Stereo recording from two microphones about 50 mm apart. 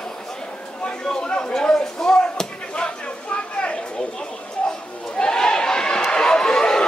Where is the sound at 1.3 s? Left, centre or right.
Centre.